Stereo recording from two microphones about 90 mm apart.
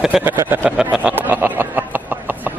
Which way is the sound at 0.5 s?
20° right (ahead or behind).